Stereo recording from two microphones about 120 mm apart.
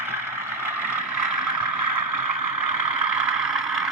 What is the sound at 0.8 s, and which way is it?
Vehicle, 10° right (ahead or behind).